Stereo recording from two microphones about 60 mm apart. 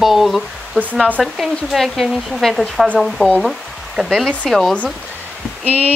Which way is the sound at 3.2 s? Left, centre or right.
Left.